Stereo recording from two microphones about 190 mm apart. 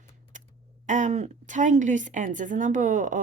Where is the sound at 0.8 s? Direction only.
40° right (ahead or behind).